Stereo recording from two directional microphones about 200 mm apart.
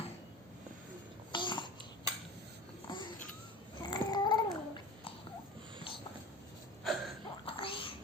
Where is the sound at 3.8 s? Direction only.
20° left (ahead or behind).